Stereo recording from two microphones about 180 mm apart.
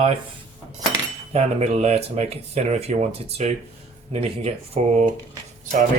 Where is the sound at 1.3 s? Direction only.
35° right (ahead or behind).